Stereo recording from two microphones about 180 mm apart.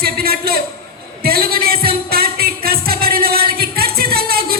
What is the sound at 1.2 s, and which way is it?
Music, 60° right (ahead or behind).